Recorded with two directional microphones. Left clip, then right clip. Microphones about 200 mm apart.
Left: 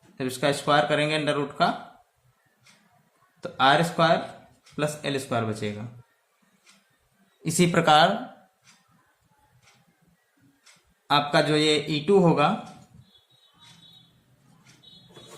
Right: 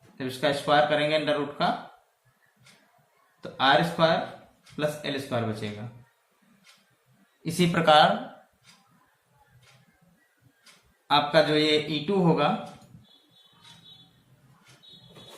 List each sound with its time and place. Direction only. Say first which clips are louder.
0.2 s a man's voice: left 1 dB; 50° left (ahead or behind)
3.4 s a man's voice: left 1 dB; 50° left (ahead or behind)
7.4 s a man's voice: left 1 dB; 50° left (ahead or behind)
11.1 s a man's voice: even; 45° left (ahead or behind)